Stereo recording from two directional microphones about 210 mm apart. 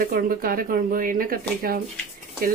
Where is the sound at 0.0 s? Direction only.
40° right (ahead or behind).